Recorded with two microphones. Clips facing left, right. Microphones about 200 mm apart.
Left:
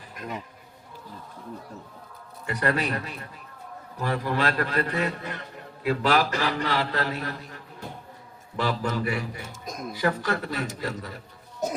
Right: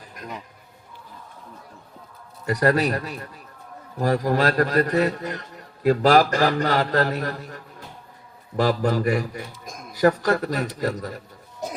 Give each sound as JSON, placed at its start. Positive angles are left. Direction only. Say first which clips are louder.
{"t": 2.5, "sound": "a man's voice", "louder": "right 6 dB", "side_deg": -40}